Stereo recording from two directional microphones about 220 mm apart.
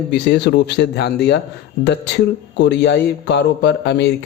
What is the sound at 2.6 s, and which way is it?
A man's voice, 50° left (ahead or behind).